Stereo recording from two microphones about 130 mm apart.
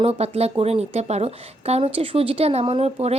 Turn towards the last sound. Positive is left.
turn(degrees=-50)  # may be behind; listen again after turning